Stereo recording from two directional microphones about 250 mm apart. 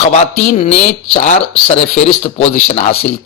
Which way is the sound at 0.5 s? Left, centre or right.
Left.